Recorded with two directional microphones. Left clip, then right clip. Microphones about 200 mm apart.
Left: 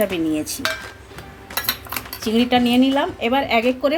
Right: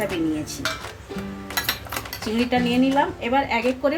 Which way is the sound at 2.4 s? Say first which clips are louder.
Left 3 dB; 50° left (ahead or behind).